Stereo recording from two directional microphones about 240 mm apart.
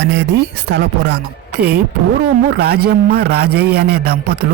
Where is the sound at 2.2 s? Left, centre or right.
Right.